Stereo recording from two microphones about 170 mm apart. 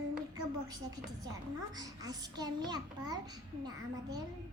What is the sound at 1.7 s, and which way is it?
A child's voice, 25° right (ahead or behind).